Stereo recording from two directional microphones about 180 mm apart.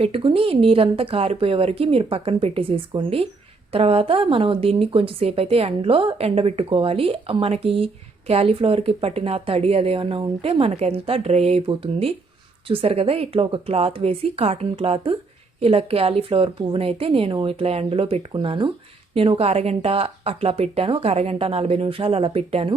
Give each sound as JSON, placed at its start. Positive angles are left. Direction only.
{"t": 0.0, "sound": "speech", "side_deg": -30}